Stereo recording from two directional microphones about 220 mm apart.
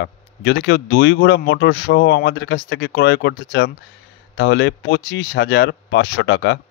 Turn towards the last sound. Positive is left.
turn(degrees=55)  # may be behind; listen again after turning